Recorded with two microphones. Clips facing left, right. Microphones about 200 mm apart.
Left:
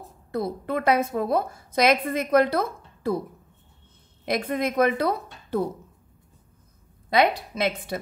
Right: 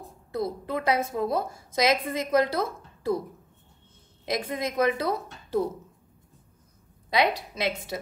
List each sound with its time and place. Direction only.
0.3 s a woman's voice: 55° left (ahead or behind)
4.3 s a woman's voice: 55° left (ahead or behind)
7.1 s a woman's voice: 55° left (ahead or behind)